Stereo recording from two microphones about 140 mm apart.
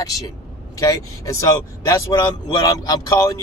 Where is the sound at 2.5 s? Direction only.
25° left (ahead or behind).